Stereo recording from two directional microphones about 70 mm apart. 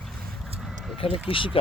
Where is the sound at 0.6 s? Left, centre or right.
Centre.